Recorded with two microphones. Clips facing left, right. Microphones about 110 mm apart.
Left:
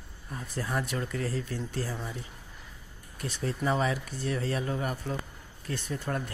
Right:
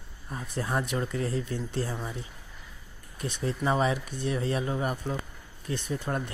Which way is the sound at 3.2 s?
20° right (ahead or behind).